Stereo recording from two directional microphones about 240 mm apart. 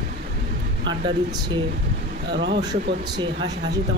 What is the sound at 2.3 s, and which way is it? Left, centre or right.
Speech, right.